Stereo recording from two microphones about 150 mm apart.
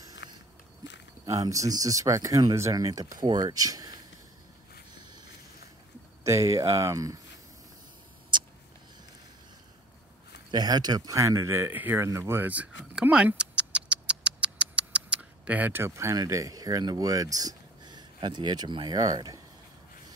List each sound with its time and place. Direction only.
1.2 s speech: 25° right (ahead or behind)
6.2 s speech: 20° right (ahead or behind)
10.5 s speech: 25° right (ahead or behind)